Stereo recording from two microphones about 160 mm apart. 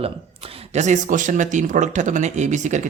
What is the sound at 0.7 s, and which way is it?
Speech, 50° right (ahead or behind).